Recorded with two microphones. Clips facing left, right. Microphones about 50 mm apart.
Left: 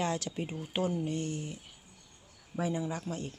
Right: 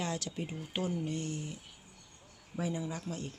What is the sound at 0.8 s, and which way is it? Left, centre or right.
Speech, left.